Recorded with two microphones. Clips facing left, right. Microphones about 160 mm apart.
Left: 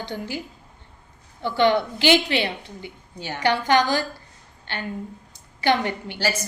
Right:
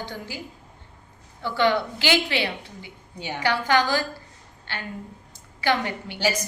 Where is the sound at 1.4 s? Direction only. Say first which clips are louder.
Left 3 dB; 20° left (ahead or behind).